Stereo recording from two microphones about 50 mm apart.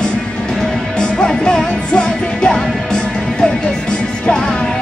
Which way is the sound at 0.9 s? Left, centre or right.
Centre.